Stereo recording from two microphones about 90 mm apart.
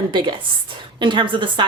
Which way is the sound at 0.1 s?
60° right (ahead or behind).